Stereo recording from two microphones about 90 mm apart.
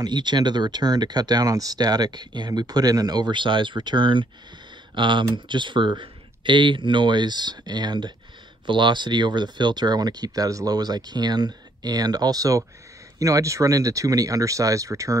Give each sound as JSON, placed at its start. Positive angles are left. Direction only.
{"t": 0.0, "sound": "speech", "side_deg": -55}